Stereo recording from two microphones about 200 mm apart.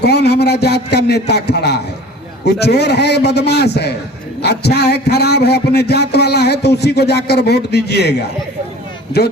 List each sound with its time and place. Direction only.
0.0 s a man's voice: 55° left (ahead or behind)